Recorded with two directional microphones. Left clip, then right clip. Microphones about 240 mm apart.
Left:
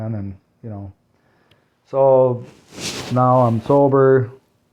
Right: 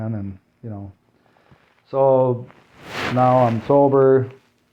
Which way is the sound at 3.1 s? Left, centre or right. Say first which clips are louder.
Left 1 dB; left.